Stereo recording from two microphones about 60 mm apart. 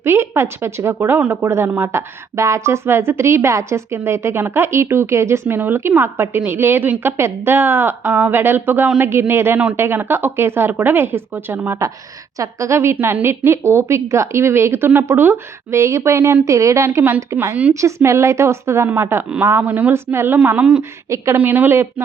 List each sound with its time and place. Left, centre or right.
0.0 s speech: right
5.5 s speech: right
9.0 s speech: right
12.4 s speech: right
15.7 s a woman's voice: right
19.6 s a woman's voice: right
20.1 s speech: right
20.4 s a woman's voice: right
21.3 s speech: right